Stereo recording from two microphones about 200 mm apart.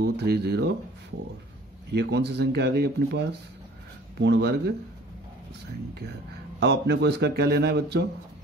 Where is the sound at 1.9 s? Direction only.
60° right (ahead or behind).